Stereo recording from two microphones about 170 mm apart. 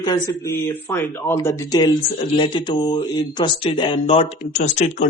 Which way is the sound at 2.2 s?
30° left (ahead or behind).